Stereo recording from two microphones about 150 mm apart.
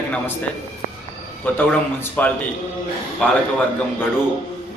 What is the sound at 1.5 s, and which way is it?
A man's voice, 10° left (ahead or behind).